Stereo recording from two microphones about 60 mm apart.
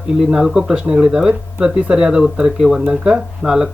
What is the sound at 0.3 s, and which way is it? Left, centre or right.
Speech, centre.